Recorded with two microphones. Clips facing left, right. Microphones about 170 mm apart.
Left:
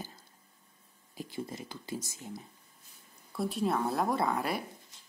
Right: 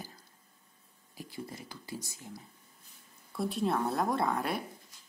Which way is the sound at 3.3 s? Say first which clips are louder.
Even; centre (ahead or behind).